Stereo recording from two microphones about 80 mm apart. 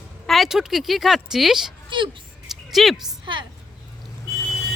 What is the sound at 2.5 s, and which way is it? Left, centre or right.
Music, centre.